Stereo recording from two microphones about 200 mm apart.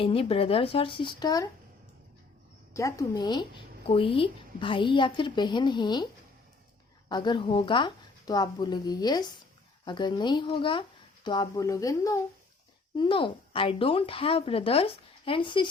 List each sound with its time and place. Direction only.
0.0 s a woman's voice: 30° left (ahead or behind)
2.7 s a woman's voice: 15° left (ahead or behind)
7.1 s a woman's voice: 20° left (ahead or behind)